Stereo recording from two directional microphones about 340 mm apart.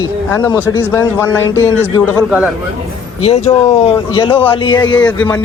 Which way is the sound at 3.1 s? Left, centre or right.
Centre.